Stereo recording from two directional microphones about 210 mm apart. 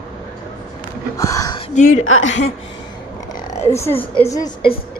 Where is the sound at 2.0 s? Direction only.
65° left (ahead or behind).